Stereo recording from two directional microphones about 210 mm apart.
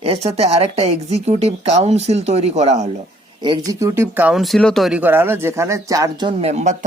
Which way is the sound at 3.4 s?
20° right (ahead or behind).